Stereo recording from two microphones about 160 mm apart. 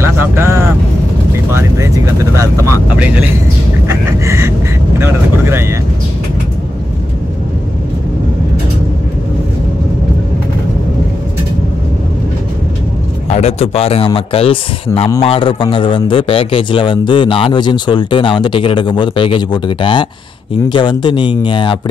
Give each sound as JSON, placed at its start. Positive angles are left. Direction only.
{"t": 0.0, "sound": "vehicle", "side_deg": -15}
{"t": 2.3, "sound": "speech", "side_deg": -20}
{"t": 3.8, "sound": "chicken", "side_deg": -20}
{"t": 4.9, "sound": "speech", "side_deg": -15}
{"t": 13.3, "sound": "a man's voice", "side_deg": 40}